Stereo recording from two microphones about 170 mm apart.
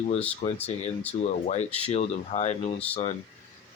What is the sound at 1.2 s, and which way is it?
Speech, 40° left (ahead or behind).